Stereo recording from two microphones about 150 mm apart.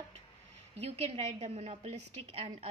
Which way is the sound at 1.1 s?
45° right (ahead or behind).